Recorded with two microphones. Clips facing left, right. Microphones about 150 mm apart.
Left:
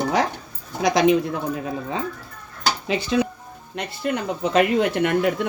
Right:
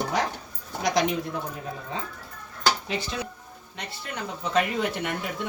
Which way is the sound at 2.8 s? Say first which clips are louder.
Left 10 dB; 90° left.